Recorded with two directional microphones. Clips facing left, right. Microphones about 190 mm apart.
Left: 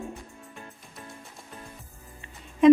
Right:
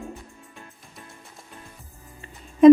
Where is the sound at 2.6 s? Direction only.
40° right (ahead or behind).